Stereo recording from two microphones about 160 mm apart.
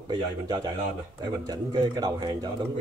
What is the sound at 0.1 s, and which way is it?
Speech, 25° right (ahead or behind).